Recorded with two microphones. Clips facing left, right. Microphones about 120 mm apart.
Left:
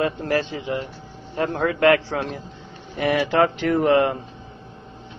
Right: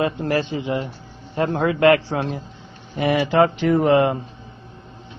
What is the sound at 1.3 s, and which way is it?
Speech, 25° right (ahead or behind).